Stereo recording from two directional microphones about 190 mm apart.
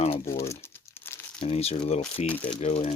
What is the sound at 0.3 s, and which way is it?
Crumpling, 15° left (ahead or behind).